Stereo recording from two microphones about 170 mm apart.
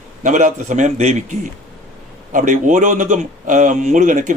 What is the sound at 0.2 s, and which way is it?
Speech, 50° right (ahead or behind).